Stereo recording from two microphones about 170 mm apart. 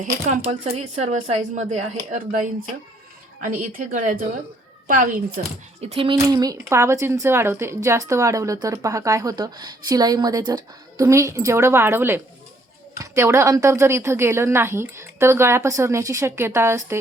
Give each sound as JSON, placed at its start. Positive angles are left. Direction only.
{"t": 0.4, "sound": "speech", "side_deg": -40}
{"t": 5.4, "sound": "speech", "side_deg": -50}
{"t": 5.8, "sound": "speech", "side_deg": -35}
{"t": 6.1, "sound": "a woman's voice", "side_deg": -20}